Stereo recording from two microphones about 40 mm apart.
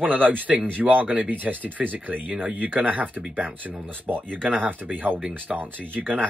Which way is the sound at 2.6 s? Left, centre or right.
Right.